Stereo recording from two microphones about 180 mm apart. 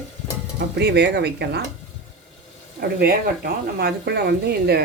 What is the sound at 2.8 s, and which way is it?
Speech, 60° right (ahead or behind).